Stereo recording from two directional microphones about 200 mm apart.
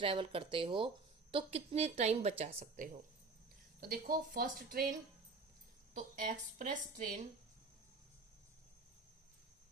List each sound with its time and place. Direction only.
0.0 s speech: 25° right (ahead or behind)
3.8 s speech: 45° right (ahead or behind)